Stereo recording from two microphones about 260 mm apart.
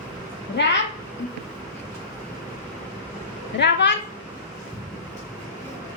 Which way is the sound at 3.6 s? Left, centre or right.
Left.